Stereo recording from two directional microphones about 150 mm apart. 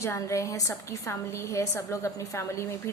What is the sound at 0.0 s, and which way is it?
A woman's voice, 20° left (ahead or behind).